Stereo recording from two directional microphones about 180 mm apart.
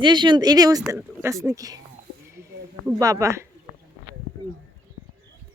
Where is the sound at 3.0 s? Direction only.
20° right (ahead or behind).